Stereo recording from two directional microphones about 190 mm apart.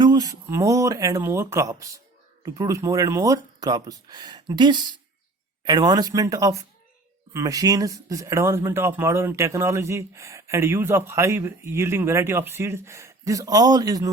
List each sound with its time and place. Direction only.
0.0 s speech: 20° right (ahead or behind)